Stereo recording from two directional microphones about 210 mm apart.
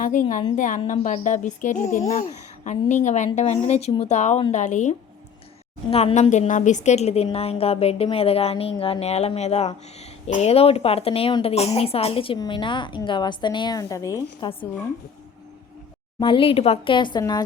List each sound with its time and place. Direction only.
0.0 s a woman's voice: 40° left (ahead or behind); by 14.7 s 20° left (ahead or behind)
16.2 s a woman's voice: 25° left (ahead or behind)